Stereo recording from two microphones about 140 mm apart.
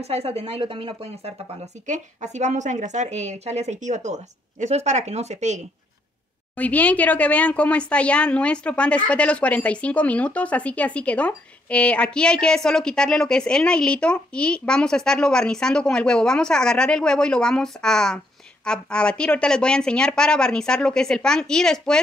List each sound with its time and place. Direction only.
0.0 s speech: 45° right (ahead or behind)
1.9 s a woman's voice: 55° right (ahead or behind)
6.5 s speech: 10° left (ahead or behind)